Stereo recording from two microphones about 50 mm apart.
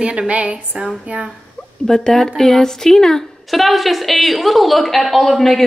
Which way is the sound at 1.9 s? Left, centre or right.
Centre.